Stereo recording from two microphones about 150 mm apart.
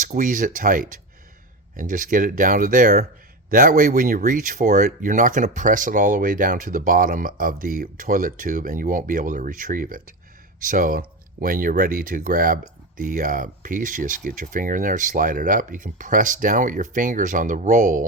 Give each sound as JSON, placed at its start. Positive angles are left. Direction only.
{"t": 0.0, "sound": "speech", "side_deg": -60}